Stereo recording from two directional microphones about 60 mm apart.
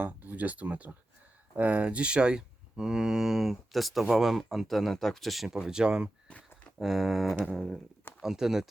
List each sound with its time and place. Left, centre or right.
0.0 s speech: right; by 5.5 s centre
5.5 s speech: centre
6.2 s a sound: centre
6.7 s speech: centre
7.4 s a sound: centre
8.2 s speech: centre